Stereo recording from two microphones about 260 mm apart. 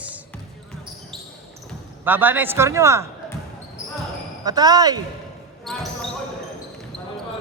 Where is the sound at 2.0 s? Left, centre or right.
Centre.